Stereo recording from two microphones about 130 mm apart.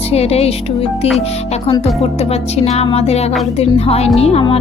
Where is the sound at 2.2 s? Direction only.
55° left (ahead or behind).